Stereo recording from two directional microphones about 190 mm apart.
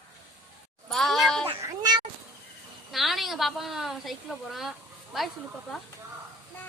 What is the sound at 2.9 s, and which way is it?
A woman's voice, centre (ahead or behind).